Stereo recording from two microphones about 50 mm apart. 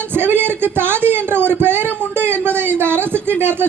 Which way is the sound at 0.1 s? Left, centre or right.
Right.